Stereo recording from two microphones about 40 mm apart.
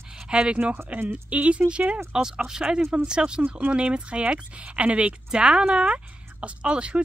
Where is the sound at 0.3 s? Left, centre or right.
Right.